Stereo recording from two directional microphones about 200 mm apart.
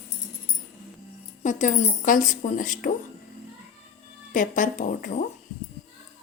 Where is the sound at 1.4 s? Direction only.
40° left (ahead or behind).